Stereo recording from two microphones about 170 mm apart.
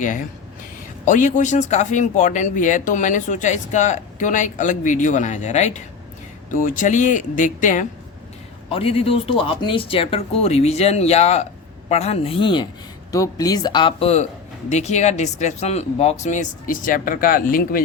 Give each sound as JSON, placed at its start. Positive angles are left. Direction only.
{"t": 0.0, "sound": "speech", "side_deg": 50}
{"t": 8.7, "sound": "speech", "side_deg": 35}